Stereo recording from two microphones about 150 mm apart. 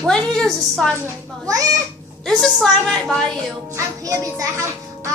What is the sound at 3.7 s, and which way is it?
Speech, 20° right (ahead or behind).